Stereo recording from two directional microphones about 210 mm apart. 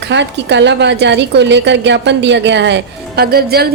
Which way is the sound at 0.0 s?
55° right (ahead or behind).